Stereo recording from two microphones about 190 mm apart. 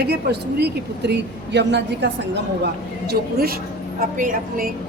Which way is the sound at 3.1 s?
50° right (ahead or behind).